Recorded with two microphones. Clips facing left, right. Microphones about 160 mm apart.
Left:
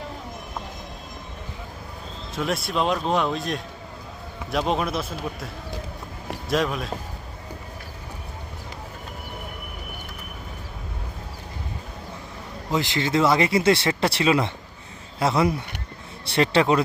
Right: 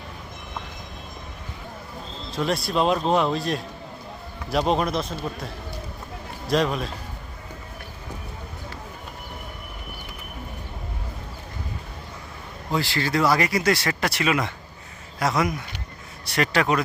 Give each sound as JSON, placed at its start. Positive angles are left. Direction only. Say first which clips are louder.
{"t": 2.3, "sound": "speech", "louder": "right 2 dB", "side_deg": 0}
{"t": 6.5, "sound": "speech", "louder": "right 2 dB", "side_deg": 0}
{"t": 12.7, "sound": "speech", "louder": "left 1 dB", "side_deg": 20}